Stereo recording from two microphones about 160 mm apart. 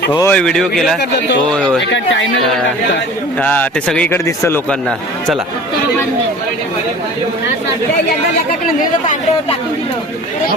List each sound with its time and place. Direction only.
0.1 s speech: 20° left (ahead or behind)
0.3 s speech: 5° left (ahead or behind)
3.3 s a man's voice: 10° left (ahead or behind)
4.7 s speech: 5° left (ahead or behind)